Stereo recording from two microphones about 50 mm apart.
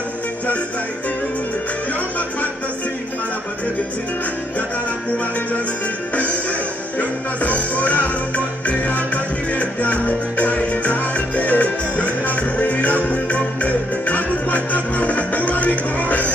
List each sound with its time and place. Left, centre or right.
6.1 s music: left